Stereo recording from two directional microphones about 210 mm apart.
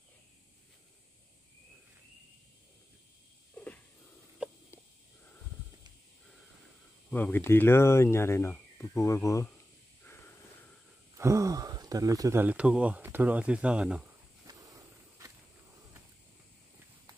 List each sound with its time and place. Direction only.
4.4 s a sound: 5° right (ahead or behind)
7.1 s speech: 10° left (ahead or behind)
11.1 s speech: 15° right (ahead or behind)
14.4 s walk: 15° right (ahead or behind)